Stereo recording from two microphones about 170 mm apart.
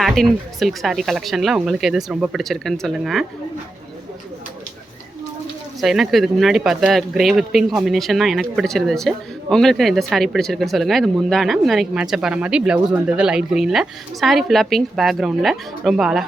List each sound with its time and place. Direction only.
0.0 s speech: centre (ahead or behind)
5.8 s speech: centre (ahead or behind)